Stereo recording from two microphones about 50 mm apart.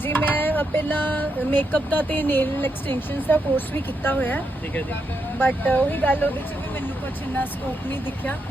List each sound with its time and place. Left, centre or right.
0.0 s speech: left
7.9 s speech: left